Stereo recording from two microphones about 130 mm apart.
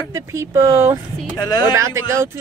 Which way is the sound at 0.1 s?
25° right (ahead or behind).